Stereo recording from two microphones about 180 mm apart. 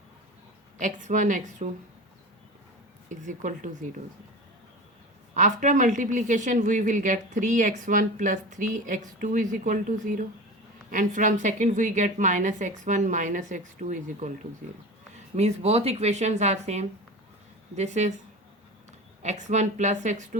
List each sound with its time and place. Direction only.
0.8 s speech: 45° right (ahead or behind)
3.1 s speech: 45° right (ahead or behind)
5.3 s speech: 45° right (ahead or behind)
15.4 s speech: 35° right (ahead or behind)